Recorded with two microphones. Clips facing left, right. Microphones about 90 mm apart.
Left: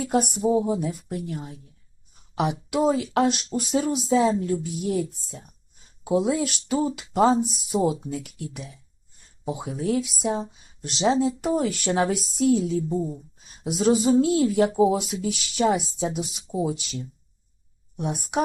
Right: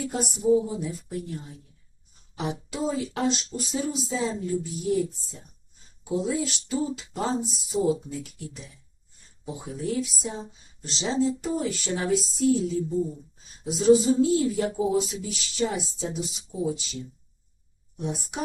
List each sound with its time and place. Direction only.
0.1 s speech: 70° left (ahead or behind)
13.7 s speech: 80° left
17.9 s speech: 65° left (ahead or behind)